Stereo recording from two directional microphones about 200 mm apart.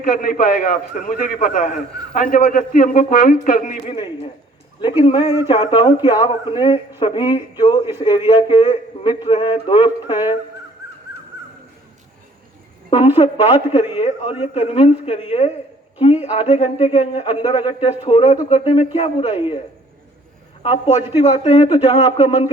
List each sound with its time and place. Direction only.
0.0 s a man's voice: 45° left (ahead or behind)
3.8 s a man's voice: 25° left (ahead or behind)
5.2 s speech: 10° right (ahead or behind)
5.5 s a man's voice: 25° left (ahead or behind)
12.9 s a man's voice: 30° left (ahead or behind)
20.6 s a man's voice: 30° left (ahead or behind)